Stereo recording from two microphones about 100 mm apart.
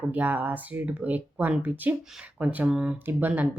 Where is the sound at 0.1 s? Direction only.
15° right (ahead or behind).